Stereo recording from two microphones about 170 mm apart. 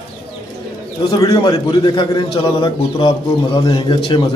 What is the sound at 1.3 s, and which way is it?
A man's voice, 25° left (ahead or behind).